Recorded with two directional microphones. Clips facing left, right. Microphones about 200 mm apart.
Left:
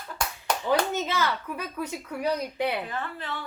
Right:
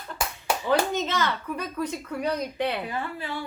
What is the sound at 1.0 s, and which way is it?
A woman's voice, 10° left (ahead or behind).